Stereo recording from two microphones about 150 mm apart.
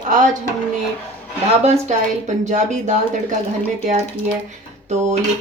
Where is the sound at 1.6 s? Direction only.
50° right (ahead or behind).